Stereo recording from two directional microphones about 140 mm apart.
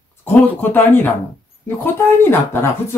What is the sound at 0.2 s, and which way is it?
Speech, 15° left (ahead or behind).